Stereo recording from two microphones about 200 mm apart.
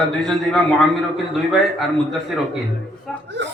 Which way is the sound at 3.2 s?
60° right (ahead or behind).